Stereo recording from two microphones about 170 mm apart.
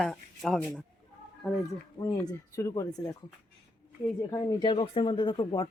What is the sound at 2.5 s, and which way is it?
Speech, 20° left (ahead or behind).